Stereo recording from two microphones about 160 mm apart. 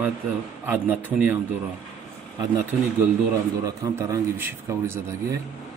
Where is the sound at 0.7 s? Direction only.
10° right (ahead or behind).